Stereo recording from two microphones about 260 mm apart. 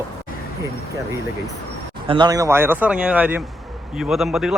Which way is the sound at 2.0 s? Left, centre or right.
Centre.